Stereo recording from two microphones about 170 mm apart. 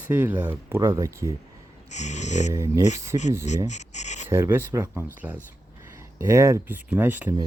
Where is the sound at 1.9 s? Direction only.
45° left (ahead or behind).